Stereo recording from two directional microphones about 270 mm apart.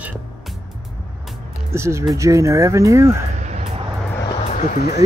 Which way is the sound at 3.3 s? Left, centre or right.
Right.